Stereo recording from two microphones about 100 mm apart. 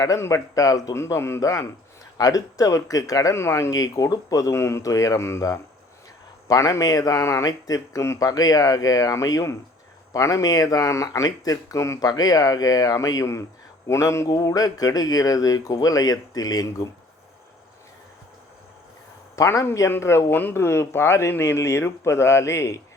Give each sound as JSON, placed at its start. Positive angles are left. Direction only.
{"t": 0.0, "sound": "speech", "side_deg": 30}
{"t": 14.3, "sound": "speech", "side_deg": 40}
{"t": 19.4, "sound": "speech", "side_deg": 30}